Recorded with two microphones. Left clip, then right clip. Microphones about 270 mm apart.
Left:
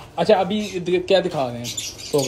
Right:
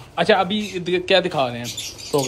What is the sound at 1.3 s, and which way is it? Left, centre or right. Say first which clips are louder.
Speech: right 2 dB; right.